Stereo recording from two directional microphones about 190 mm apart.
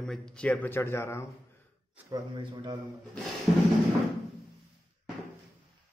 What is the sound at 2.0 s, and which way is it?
Speech, 20° right (ahead or behind).